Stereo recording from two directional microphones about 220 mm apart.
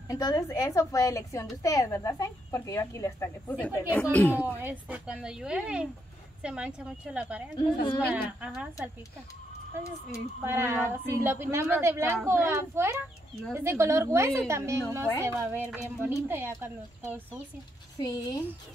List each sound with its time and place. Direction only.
0.1 s a woman's voice: 15° left (ahead or behind)
4.6 s a woman's voice: 10° right (ahead or behind)
7.5 s a woman's voice: 20° left (ahead or behind)
8.1 s a woman's voice: 5° right (ahead or behind)
10.4 s a woman's voice: 10° right (ahead or behind)
17.9 s a woman's voice: 15° left (ahead or behind)